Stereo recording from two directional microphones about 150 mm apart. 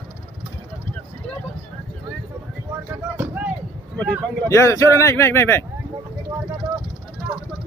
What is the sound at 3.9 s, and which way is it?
Speech, 5° left (ahead or behind).